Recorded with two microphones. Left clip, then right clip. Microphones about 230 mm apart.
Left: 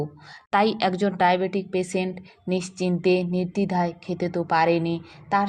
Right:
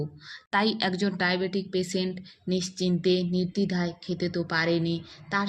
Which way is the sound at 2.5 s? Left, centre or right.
Centre.